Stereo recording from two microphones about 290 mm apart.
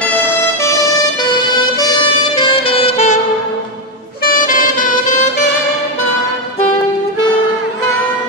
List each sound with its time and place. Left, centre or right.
1.8 s saxophone: centre
4.2 s saxophone: left